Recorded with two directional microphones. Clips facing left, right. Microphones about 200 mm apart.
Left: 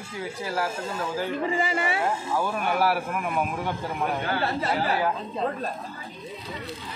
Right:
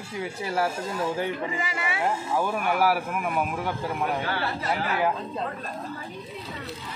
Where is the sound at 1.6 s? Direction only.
30° left (ahead or behind).